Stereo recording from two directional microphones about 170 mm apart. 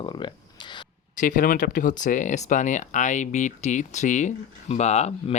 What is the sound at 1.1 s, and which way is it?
Speech, 55° left (ahead or behind).